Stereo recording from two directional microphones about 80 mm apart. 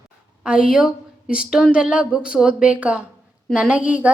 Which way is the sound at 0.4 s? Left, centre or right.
Centre.